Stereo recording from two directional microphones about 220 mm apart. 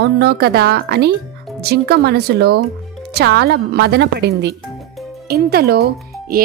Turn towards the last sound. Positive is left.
turn(degrees=-45)  # may be behind; listen again after turning